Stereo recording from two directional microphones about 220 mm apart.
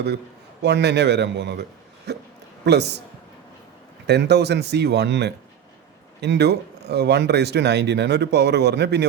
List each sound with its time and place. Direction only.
0.6 s speech: 50° right (ahead or behind)
2.1 s a sound: 50° right (ahead or behind)
2.6 s speech: 50° right (ahead or behind)
4.0 s speech: 50° right (ahead or behind)